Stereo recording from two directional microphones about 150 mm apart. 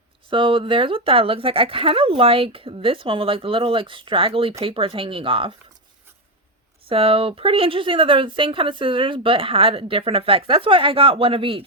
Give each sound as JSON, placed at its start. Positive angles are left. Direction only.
{"t": 0.3, "sound": "a woman's voice", "side_deg": -35}
{"t": 6.8, "sound": "a woman's voice", "side_deg": -40}